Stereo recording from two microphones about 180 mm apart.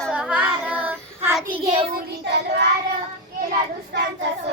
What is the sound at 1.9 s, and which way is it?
Child singing, 70° right (ahead or behind).